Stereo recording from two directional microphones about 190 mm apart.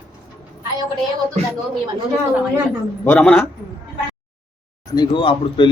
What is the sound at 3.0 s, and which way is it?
Speech, 5° left (ahead or behind).